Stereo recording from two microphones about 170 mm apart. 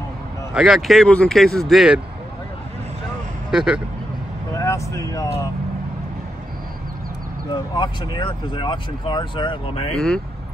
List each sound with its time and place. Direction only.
0.6 s speech: centre (ahead or behind)
3.5 s speech: 5° right (ahead or behind)
4.6 s vehicle: 20° left (ahead or behind)
5.1 s speech: 20° left (ahead or behind)
7.5 s speech: 25° left (ahead or behind)
9.9 s speech: 5° left (ahead or behind)